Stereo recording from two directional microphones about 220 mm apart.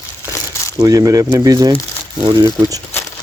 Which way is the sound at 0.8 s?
15° right (ahead or behind).